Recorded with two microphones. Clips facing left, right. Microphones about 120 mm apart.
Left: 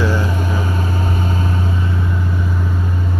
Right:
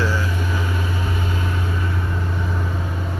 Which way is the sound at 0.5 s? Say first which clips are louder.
Left 4 dB; 40° left (ahead or behind).